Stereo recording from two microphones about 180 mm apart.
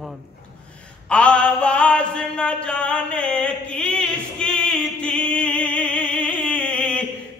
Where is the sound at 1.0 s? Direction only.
5° left (ahead or behind).